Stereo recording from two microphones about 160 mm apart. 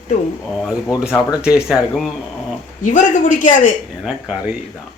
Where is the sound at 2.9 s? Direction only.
55° left (ahead or behind).